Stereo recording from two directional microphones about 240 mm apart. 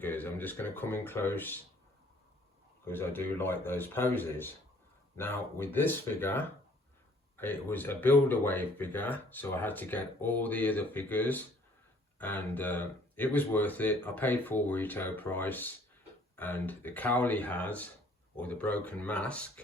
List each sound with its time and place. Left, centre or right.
0.0 s speech: centre
2.8 s speech: centre